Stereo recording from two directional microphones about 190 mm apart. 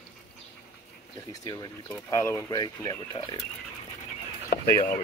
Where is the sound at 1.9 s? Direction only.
15° left (ahead or behind).